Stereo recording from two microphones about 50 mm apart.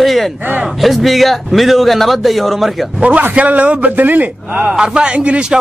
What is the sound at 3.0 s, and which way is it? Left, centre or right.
A man's voice, right.